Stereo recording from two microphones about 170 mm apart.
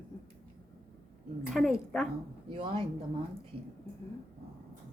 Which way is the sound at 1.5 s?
Centre (ahead or behind).